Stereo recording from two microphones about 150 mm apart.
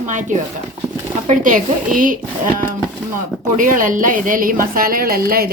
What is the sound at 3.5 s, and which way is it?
A woman's voice, 65° right (ahead or behind).